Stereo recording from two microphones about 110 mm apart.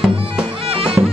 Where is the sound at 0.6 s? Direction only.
60° right (ahead or behind).